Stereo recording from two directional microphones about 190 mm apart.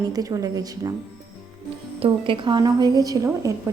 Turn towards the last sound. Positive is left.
turn(degrees=-15)  # may be behind; listen again after turning